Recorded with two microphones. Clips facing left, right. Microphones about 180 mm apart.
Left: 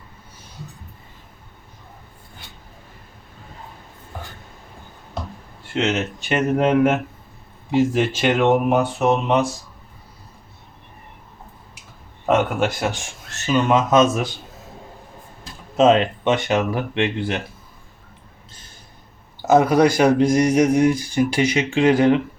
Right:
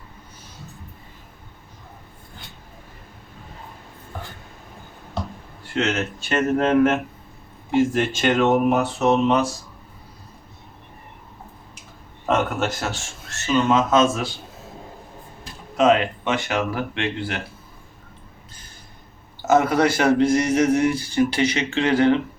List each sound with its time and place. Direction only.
5.7 s speech: 20° left (ahead or behind)
12.2 s speech: 10° left (ahead or behind)
15.8 s speech: 20° left (ahead or behind)
19.5 s speech: 15° left (ahead or behind)